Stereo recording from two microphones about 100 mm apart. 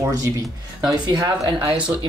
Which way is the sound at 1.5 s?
60° right (ahead or behind).